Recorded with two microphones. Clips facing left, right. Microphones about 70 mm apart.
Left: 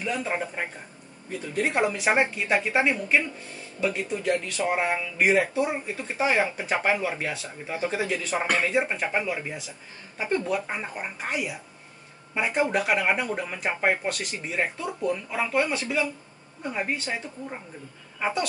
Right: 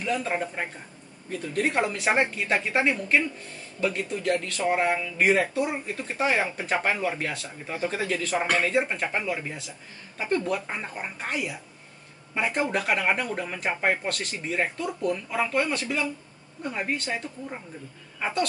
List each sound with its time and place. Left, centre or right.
0.0 s speech: centre